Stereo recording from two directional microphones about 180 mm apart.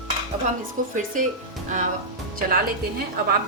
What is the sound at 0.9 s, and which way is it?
Speech, 45° right (ahead or behind).